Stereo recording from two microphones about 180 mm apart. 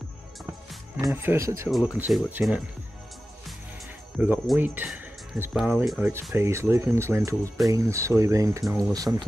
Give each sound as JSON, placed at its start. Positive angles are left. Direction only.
{"t": 1.0, "sound": "speech", "side_deg": -15}
{"t": 1.7, "sound": "speech", "side_deg": 0}
{"t": 4.2, "sound": "speech", "side_deg": -10}